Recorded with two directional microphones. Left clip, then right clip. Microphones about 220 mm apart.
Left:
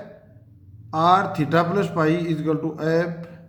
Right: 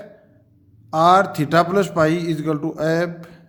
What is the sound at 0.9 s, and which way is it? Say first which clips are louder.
A man's voice: right 4 dB; 40° right (ahead or behind).